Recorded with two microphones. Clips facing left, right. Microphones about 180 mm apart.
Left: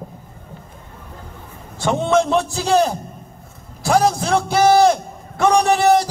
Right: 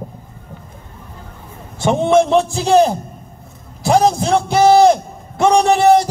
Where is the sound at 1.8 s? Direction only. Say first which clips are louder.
Right 4 dB; 20° right (ahead or behind).